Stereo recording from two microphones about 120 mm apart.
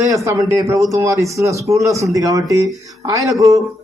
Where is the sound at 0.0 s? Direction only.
25° right (ahead or behind).